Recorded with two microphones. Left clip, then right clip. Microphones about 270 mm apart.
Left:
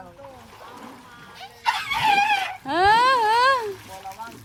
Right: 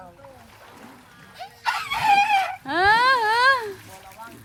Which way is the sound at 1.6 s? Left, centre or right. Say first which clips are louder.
Even; centre.